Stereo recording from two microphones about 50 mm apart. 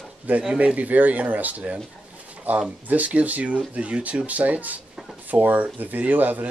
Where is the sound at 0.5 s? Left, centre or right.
Right.